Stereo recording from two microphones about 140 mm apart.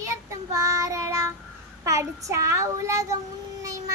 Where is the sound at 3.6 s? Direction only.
25° right (ahead or behind).